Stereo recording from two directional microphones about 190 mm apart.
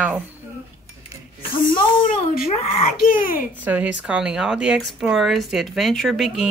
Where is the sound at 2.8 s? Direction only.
45° left (ahead or behind).